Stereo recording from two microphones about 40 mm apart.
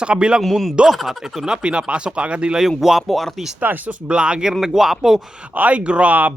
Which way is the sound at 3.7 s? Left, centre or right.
Right.